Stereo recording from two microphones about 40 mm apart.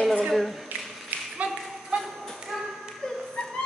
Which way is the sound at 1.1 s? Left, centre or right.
Right.